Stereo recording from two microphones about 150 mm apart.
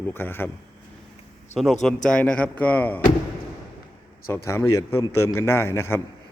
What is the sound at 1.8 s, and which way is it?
A man's voice, 5° left (ahead or behind).